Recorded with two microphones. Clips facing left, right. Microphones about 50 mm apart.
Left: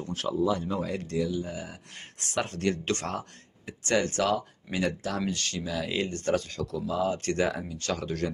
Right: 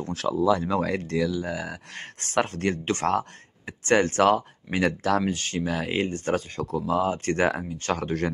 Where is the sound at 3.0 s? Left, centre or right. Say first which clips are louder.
Right 10 dB; right.